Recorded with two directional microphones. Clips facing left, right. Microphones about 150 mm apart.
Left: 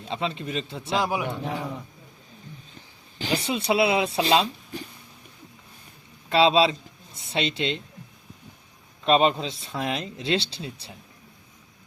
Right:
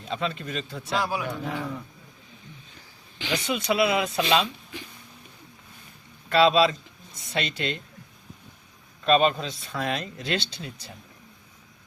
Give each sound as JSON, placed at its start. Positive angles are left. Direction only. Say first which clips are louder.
{"t": 0.1, "sound": "speech", "louder": "left 1 dB", "side_deg": 25}
{"t": 3.2, "sound": "speech", "louder": "left 2 dB", "side_deg": 35}
{"t": 6.2, "sound": "speech", "louder": "even", "side_deg": 25}
{"t": 9.0, "sound": "speech", "louder": "left 1 dB", "side_deg": 25}